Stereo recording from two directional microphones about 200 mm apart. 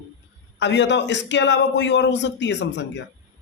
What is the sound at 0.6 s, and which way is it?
A man's voice, 60° left (ahead or behind).